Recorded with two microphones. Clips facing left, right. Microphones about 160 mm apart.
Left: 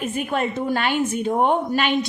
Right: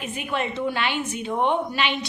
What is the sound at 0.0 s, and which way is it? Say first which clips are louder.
A woman's voice: left 4 dB; 45° left (ahead or behind).